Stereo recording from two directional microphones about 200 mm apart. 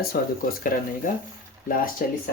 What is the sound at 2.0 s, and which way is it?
Speech, 45° left (ahead or behind).